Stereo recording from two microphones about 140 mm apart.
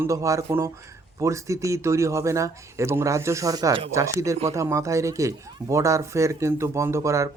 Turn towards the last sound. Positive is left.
turn(degrees=-20)  # may be behind; listen again after turning